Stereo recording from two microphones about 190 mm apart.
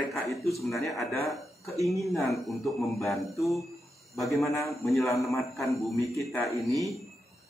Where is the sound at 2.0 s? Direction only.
Centre (ahead or behind).